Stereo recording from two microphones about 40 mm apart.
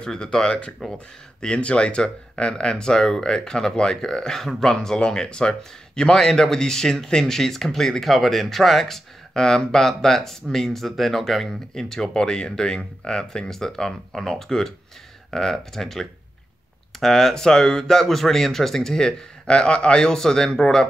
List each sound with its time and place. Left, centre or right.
0.0 s speech: centre
1.4 s speech: left; by 20.8 s centre